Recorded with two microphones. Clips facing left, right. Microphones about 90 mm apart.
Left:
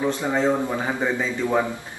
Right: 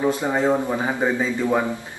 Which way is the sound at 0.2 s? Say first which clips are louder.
Right 1 dB; 20° right (ahead or behind).